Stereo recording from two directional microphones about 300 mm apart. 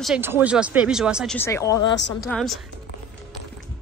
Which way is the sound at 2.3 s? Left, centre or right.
Centre.